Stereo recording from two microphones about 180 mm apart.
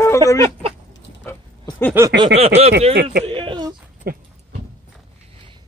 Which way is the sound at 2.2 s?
35° right (ahead or behind).